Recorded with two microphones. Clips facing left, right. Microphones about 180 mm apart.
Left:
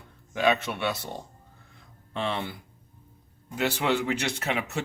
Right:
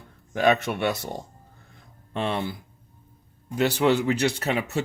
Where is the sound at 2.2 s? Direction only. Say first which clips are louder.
Right 3 dB; 45° right (ahead or behind).